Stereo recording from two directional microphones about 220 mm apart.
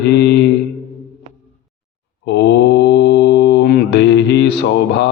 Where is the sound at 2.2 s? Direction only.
50° left (ahead or behind).